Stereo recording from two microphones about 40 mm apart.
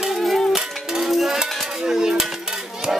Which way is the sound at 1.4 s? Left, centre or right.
Centre.